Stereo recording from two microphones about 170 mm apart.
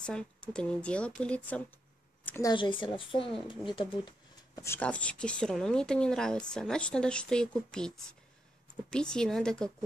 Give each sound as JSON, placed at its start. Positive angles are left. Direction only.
{"t": 0.0, "sound": "a woman's voice", "side_deg": 5}
{"t": 2.5, "sound": "a woman's voice", "side_deg": 30}
{"t": 4.6, "sound": "speech", "side_deg": 10}